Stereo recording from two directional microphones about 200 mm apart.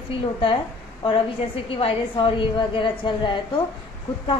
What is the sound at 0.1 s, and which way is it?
Speech, 25° left (ahead or behind).